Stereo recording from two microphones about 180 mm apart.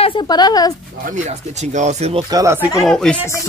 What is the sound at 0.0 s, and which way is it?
Speech, 25° left (ahead or behind).